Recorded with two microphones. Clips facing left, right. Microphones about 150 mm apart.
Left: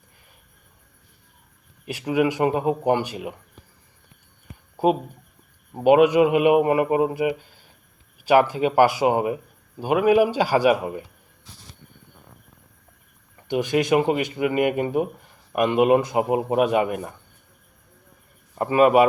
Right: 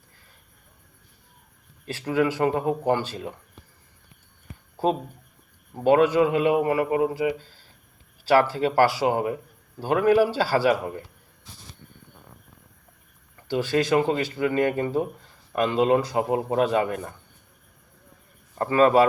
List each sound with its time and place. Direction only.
1.8 s speech: 15° left (ahead or behind)
4.8 s speech: 15° left (ahead or behind)
13.5 s speech: 20° left (ahead or behind)
18.5 s speech: 15° left (ahead or behind)